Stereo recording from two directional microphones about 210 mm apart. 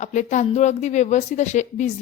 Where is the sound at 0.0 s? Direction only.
35° left (ahead or behind).